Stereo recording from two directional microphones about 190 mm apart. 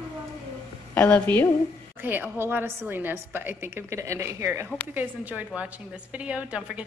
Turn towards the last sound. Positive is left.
turn(degrees=-5)  # may be behind; listen again after turning